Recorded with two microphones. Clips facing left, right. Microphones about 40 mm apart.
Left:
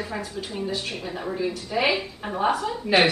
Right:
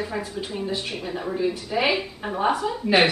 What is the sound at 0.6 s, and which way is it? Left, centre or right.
A woman's voice, centre.